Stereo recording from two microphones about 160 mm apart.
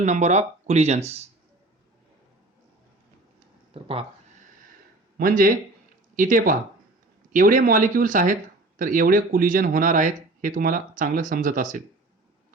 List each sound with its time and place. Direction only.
0.0 s speech: 45° right (ahead or behind)
5.1 s speech: 60° right (ahead or behind)